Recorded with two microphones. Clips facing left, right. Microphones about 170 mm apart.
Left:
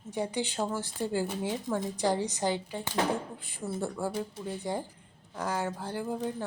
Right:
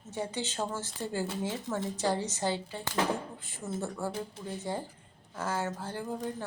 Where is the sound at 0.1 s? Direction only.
15° left (ahead or behind).